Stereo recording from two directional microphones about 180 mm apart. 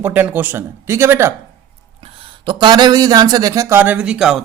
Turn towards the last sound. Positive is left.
turn(degrees=-5)  # may be behind; listen again after turning